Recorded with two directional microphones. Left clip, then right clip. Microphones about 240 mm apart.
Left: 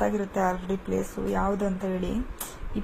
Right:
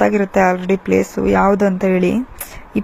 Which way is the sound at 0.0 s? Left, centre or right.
Right.